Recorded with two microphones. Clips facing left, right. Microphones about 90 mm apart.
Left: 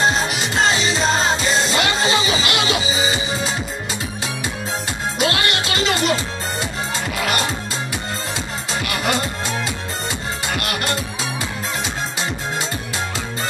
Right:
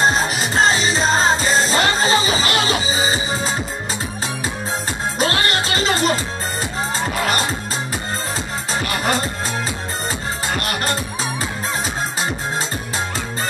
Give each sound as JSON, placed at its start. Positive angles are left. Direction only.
{"t": 0.0, "sound": "music", "side_deg": -40}
{"t": 5.2, "sound": "music", "side_deg": -40}
{"t": 7.2, "sound": "music", "side_deg": -35}
{"t": 8.7, "sound": "music", "side_deg": -35}
{"t": 10.5, "sound": "music", "side_deg": -35}